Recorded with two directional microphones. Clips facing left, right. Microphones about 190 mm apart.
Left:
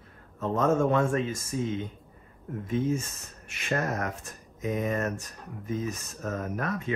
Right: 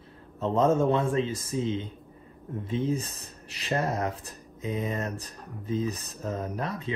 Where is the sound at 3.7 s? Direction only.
25° right (ahead or behind).